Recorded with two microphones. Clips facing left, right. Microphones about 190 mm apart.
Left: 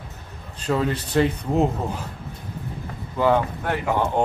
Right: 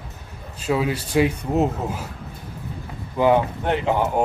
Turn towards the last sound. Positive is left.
turn(degrees=-20)  # may be behind; listen again after turning